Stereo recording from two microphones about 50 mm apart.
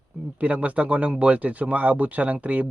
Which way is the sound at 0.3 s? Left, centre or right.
Right.